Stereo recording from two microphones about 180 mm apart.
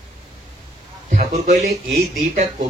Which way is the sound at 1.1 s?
45° right (ahead or behind).